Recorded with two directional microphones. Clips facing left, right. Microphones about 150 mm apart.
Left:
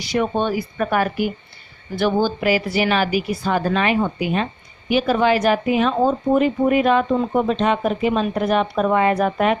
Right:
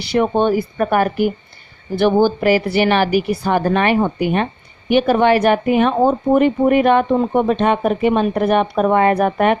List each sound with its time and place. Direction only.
0.0 s speech: 60° right (ahead or behind)